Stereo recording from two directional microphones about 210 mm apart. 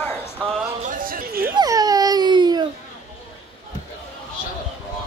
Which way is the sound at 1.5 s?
20° right (ahead or behind).